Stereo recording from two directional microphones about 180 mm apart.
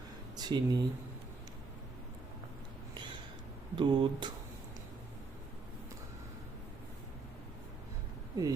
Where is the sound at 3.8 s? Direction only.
25° right (ahead or behind).